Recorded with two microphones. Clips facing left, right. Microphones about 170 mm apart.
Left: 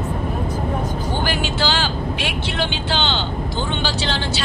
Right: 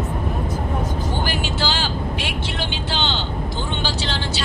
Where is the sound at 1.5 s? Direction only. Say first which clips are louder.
Left 2 dB; 65° left (ahead or behind).